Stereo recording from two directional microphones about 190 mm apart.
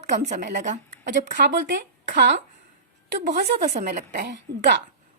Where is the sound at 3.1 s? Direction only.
60° right (ahead or behind).